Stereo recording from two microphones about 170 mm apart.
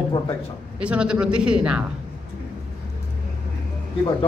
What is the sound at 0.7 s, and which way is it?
A man's voice, 5° right (ahead or behind).